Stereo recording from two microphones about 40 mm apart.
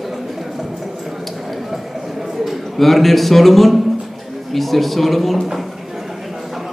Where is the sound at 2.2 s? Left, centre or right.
Centre.